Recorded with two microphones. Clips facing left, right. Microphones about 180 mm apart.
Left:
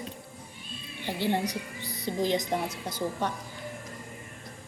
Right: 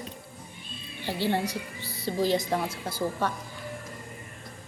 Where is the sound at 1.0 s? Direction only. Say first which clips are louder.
Right 1 dB; 15° left (ahead or behind).